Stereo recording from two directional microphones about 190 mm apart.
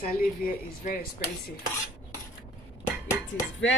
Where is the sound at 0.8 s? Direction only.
50° left (ahead or behind).